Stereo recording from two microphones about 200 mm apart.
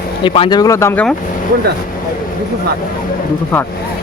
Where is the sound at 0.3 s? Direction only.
25° left (ahead or behind).